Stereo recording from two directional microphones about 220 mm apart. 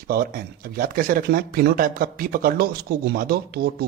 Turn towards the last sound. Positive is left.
turn(degrees=-45)  # may be behind; listen again after turning